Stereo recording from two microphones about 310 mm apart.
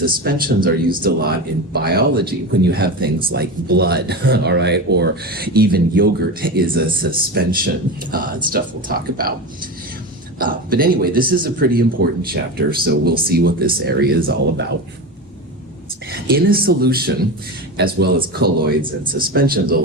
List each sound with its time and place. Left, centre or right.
0.0 s speech: right
10.3 s speech: right
16.2 s speech: right